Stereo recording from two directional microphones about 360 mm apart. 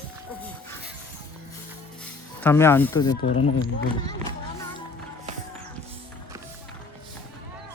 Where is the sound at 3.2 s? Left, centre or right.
Left.